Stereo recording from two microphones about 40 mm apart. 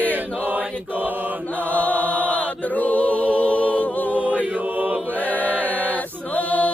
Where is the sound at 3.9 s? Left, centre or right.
Left.